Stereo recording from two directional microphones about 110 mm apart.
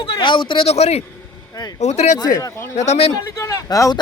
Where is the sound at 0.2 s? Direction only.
50° left (ahead or behind).